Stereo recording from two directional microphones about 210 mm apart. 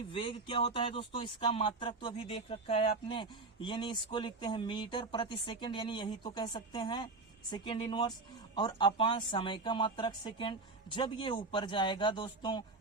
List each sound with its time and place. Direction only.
0.1 s speech: 25° left (ahead or behind)